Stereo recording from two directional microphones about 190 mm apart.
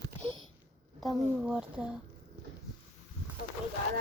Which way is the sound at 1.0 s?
5° right (ahead or behind).